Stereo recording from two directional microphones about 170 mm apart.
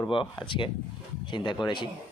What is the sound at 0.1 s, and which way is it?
Speech, 30° left (ahead or behind).